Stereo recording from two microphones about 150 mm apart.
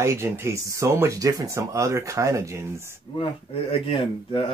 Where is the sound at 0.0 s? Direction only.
20° right (ahead or behind).